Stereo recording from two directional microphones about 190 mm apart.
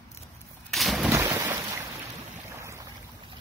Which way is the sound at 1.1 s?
15° right (ahead or behind).